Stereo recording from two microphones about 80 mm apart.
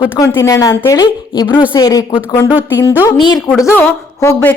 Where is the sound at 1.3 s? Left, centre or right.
Left.